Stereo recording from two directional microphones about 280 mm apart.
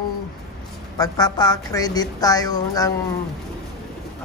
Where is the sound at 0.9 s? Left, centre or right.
Centre.